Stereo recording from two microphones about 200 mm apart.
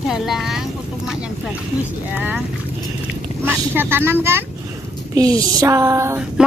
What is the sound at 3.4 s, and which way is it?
Speech, 10° right (ahead or behind).